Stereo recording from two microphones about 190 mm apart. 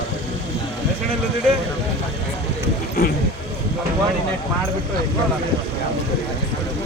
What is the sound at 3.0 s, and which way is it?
Speech, 50° left (ahead or behind).